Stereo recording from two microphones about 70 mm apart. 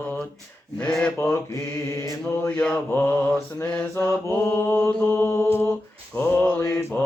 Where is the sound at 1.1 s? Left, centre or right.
Left.